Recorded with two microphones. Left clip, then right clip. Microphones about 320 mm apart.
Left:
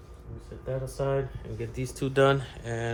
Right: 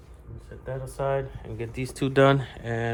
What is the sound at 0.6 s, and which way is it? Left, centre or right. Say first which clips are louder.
Speech: right 1 dB; centre.